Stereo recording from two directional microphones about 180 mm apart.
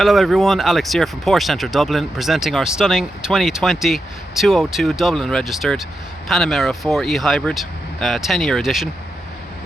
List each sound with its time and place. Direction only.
0.0 s speech: centre (ahead or behind)